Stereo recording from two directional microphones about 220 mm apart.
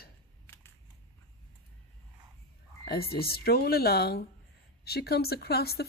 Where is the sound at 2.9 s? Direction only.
45° left (ahead or behind).